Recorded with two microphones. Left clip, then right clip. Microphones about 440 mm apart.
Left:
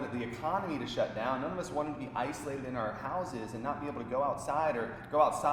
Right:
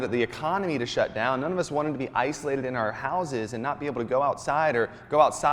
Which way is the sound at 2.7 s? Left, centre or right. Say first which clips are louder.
Right 8 dB; right.